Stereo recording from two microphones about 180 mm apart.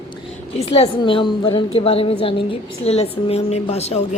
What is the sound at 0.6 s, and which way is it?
A woman's voice, 35° left (ahead or behind).